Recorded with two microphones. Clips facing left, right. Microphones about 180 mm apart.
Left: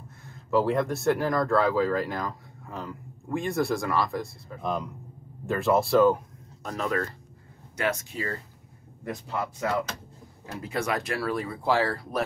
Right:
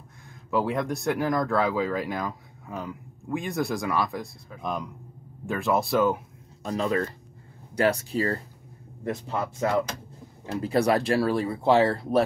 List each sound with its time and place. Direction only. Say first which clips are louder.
0.6 s speech: left 2 dB; centre (ahead or behind)
6.7 s speech: right 3 dB; 20° right (ahead or behind)
7.7 s speech: right 6 dB; 35° right (ahead or behind)